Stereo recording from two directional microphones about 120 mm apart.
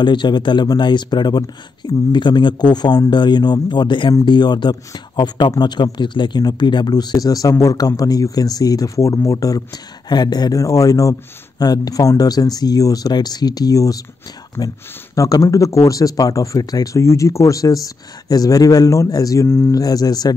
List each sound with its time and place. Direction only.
0.0 s speech: 40° left (ahead or behind)